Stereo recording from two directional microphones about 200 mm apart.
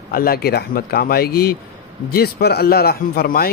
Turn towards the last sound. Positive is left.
turn(degrees=50)  # may be behind; listen again after turning